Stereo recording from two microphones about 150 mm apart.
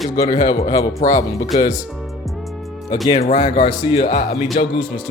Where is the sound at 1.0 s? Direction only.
60° left (ahead or behind).